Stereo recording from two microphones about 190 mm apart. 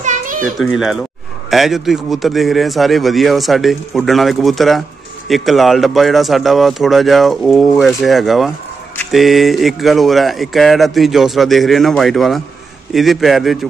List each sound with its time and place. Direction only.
0.0 s children playing: 40° right (ahead or behind)
0.6 s speech: centre (ahead or behind)